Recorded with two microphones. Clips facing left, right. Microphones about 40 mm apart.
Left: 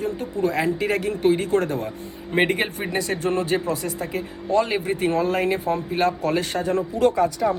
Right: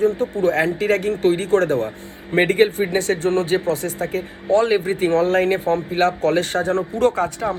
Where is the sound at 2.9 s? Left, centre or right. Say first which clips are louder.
Right 4 dB; right.